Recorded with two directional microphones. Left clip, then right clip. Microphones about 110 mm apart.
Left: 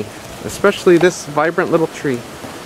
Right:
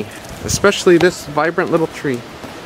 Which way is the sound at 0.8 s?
15° right (ahead or behind).